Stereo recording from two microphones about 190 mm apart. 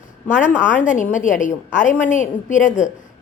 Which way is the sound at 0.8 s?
40° left (ahead or behind).